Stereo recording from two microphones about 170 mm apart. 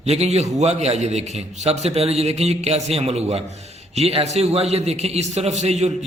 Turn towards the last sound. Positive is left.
turn(degrees=-40)  # may be behind; listen again after turning